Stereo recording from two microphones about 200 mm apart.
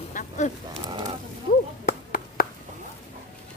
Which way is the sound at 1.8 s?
50° left (ahead or behind).